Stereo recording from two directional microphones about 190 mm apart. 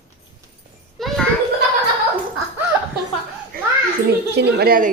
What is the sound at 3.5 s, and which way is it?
Children playing, 50° right (ahead or behind).